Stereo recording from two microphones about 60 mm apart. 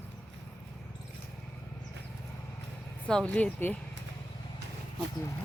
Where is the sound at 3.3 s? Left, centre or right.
Left.